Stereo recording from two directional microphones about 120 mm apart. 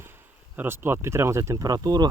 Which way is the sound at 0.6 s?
20° right (ahead or behind).